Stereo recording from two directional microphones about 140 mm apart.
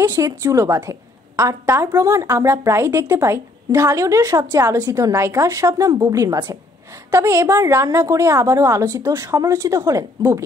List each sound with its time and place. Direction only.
0.0 s a woman's voice: 20° right (ahead or behind)